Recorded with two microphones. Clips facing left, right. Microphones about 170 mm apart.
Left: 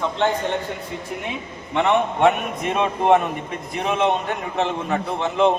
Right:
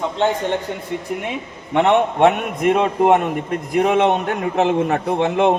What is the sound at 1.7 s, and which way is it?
A man's voice, 65° right (ahead or behind).